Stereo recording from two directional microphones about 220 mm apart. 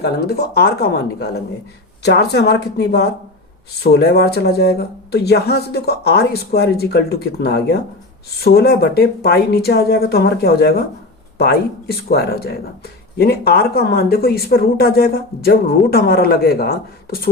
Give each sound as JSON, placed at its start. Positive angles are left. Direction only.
{"t": 0.0, "sound": "speech", "side_deg": 45}